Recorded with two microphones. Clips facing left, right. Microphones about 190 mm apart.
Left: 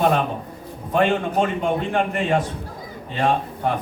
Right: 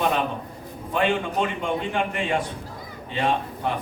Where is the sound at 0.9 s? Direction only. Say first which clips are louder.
Left 4 dB; 45° left (ahead or behind).